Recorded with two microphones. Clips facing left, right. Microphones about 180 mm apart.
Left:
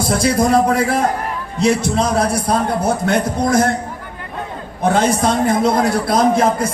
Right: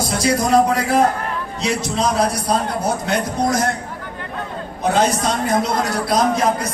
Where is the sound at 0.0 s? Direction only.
55° left (ahead or behind).